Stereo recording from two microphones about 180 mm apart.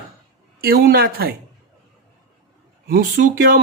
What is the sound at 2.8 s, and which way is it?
Speech, 55° right (ahead or behind).